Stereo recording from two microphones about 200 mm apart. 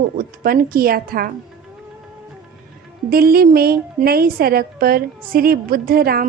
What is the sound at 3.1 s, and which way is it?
A woman's voice, 50° right (ahead or behind).